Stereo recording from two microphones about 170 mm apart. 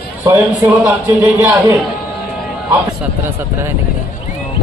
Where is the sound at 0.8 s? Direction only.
20° right (ahead or behind).